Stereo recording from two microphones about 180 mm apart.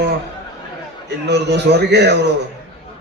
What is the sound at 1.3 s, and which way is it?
Speech, 70° right (ahead or behind).